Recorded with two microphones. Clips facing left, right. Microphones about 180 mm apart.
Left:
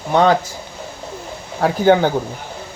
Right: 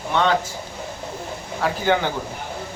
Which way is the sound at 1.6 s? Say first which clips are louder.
Left 7 dB; 45° left (ahead or behind).